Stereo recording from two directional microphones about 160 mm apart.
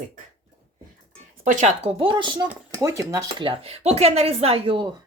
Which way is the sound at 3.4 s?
35° right (ahead or behind).